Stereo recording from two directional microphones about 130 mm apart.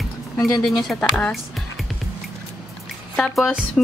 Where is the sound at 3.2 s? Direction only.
Centre (ahead or behind).